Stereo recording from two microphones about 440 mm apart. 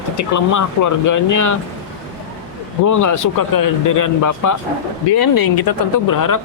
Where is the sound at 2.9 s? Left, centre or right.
Left.